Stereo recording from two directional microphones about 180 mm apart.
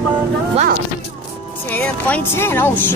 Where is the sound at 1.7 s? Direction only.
10° left (ahead or behind).